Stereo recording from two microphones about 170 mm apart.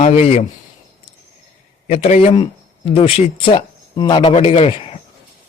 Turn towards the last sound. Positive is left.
turn(degrees=35)  # may be behind; listen again after turning